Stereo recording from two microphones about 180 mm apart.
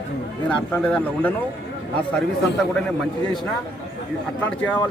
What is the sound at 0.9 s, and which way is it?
Speech, 10° left (ahead or behind).